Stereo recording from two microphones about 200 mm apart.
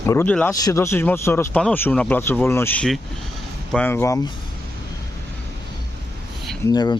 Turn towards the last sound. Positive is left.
turn(degrees=20)  # may be behind; listen again after turning